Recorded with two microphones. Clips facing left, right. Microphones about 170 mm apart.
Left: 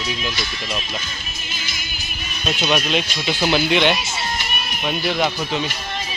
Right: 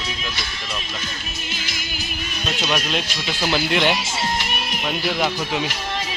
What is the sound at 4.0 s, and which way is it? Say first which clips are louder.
Music: right 2 dB; 90° right.